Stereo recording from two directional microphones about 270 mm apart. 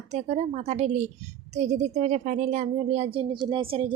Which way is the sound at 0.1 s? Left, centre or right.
Right.